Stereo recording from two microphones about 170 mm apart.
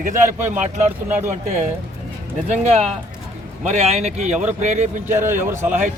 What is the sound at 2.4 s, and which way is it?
A man's voice, 40° right (ahead or behind).